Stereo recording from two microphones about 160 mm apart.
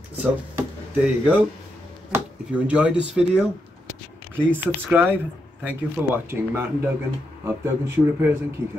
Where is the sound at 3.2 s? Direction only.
5° right (ahead or behind).